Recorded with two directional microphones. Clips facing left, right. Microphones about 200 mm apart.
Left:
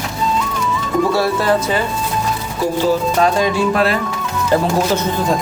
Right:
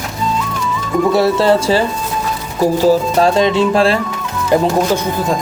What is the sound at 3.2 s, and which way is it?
Music, 25° right (ahead or behind).